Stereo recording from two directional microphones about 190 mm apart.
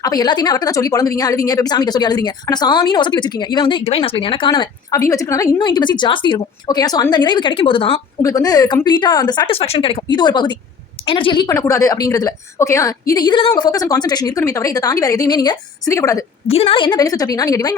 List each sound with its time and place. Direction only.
0.0 s a woman's voice: 20° left (ahead or behind)
16.5 s a woman's voice: 30° left (ahead or behind)